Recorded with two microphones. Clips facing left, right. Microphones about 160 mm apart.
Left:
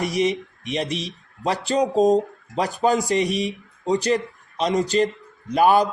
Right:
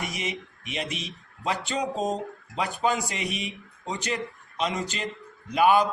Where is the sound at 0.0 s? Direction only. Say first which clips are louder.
Left 11 dB; 35° left (ahead or behind).